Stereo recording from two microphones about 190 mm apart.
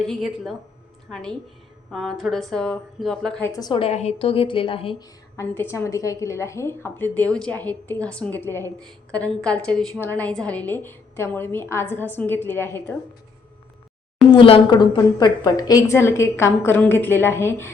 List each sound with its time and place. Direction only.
0.0 s a woman's voice: centre (ahead or behind)
1.9 s a woman's voice: centre (ahead or behind)
3.5 s a woman's voice: 20° left (ahead or behind)
5.4 s a woman's voice: 15° left (ahead or behind)
14.3 s a woman's voice: 25° left (ahead or behind)